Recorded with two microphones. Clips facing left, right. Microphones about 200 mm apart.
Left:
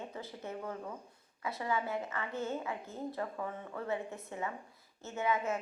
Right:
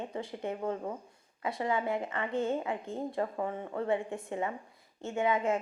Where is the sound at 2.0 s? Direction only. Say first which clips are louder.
Right 5 dB; 30° right (ahead or behind).